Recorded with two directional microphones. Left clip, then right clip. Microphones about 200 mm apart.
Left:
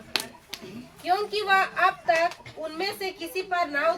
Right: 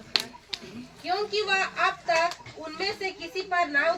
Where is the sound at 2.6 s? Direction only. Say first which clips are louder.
Left 1 dB; 35° left (ahead or behind).